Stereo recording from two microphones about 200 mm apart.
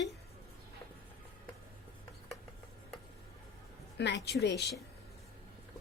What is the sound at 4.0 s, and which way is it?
Speech, 60° left (ahead or behind).